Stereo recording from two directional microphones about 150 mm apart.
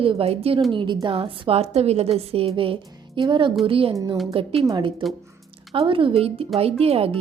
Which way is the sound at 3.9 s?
20° right (ahead or behind).